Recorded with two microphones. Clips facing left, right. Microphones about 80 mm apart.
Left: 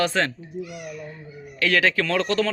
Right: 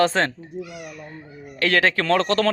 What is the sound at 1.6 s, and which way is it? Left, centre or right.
Speech, right.